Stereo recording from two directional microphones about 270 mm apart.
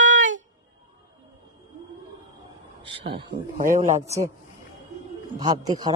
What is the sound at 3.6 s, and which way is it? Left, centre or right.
Speech, right.